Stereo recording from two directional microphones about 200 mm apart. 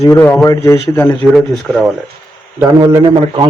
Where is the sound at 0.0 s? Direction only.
10° left (ahead or behind).